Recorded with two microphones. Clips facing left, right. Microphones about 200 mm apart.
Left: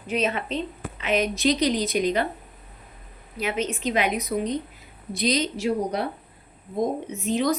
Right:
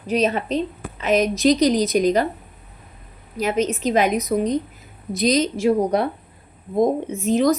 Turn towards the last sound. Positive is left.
turn(degrees=-45)  # may be behind; listen again after turning